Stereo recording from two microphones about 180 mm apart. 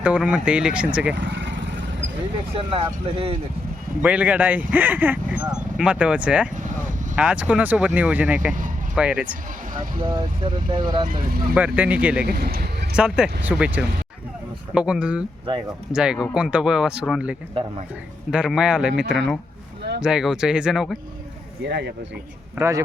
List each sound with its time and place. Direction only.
0.0 s speech: 5° right (ahead or behind)
1.1 s speech: 80° right
2.6 s speech: 30° right (ahead or behind)
4.0 s speech: 10° right (ahead or behind)
9.7 s speech: 50° right (ahead or behind)
10.1 s speech: 25° right (ahead or behind)
11.1 s speech: 55° right (ahead or behind)
11.5 s speech: 10° right (ahead or behind)
12.2 s speech: 60° right (ahead or behind)
13.0 s speech: 5° right (ahead or behind)
21.7 s speech: 70° right (ahead or behind)
22.5 s speech: 15° right (ahead or behind)